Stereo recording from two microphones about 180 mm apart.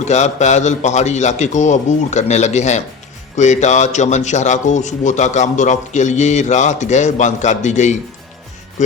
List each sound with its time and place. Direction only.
0.0 s a man's voice: 40° left (ahead or behind)